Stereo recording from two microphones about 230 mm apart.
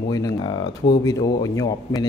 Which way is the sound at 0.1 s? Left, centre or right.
Centre.